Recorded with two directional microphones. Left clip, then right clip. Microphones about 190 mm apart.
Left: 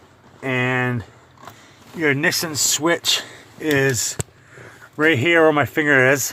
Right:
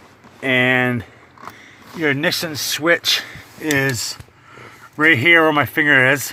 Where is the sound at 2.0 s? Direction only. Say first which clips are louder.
Even; 10° left (ahead or behind).